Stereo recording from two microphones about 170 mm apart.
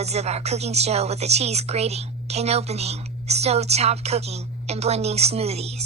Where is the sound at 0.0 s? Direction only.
40° right (ahead or behind).